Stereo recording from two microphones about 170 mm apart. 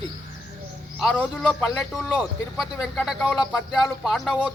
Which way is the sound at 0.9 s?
5° left (ahead or behind).